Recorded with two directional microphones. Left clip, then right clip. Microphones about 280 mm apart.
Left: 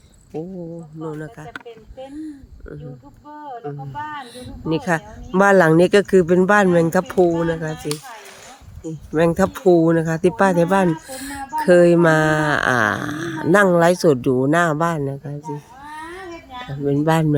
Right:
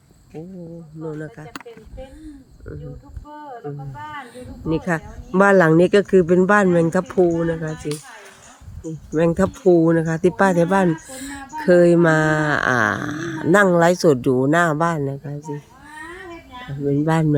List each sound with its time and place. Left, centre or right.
1.1 s speech: centre
4.7 s speech: centre
7.8 s speech: left
9.1 s speech: centre
15.4 s a sound: centre
16.8 s speech: centre